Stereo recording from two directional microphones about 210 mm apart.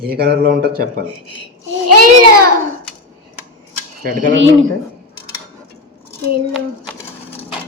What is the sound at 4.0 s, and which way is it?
Speech, 40° right (ahead or behind).